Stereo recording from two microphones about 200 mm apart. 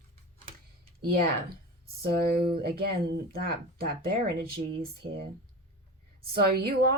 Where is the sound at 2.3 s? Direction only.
50° right (ahead or behind).